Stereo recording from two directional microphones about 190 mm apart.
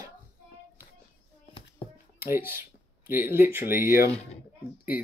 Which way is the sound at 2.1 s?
10° right (ahead or behind).